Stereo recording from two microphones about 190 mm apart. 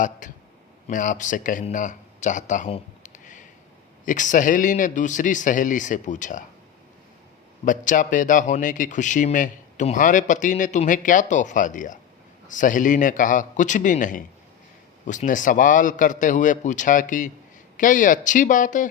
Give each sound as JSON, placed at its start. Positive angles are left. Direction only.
{"t": 0.2, "sound": "a sound", "side_deg": 45}
{"t": 0.9, "sound": "a man's voice", "side_deg": 45}
{"t": 7.6, "sound": "a man's voice", "side_deg": 45}